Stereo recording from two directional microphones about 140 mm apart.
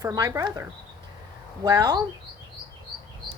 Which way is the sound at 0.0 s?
20° right (ahead or behind).